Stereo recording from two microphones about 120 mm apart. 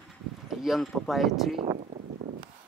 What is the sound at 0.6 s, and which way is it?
Speech, centre (ahead or behind).